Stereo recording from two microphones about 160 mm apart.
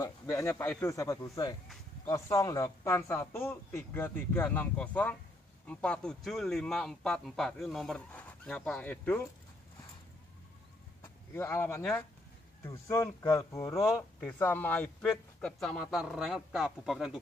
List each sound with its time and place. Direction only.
0.0 s a man's voice: 20° left (ahead or behind)
11.0 s a man's voice: 15° left (ahead or behind); by 17.2 s 5° right (ahead or behind)